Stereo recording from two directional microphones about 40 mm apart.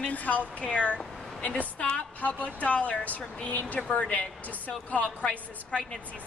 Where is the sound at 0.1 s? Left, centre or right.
Left.